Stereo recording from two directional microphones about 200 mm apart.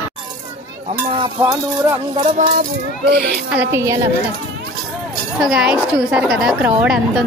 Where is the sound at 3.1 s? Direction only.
55° right (ahead or behind).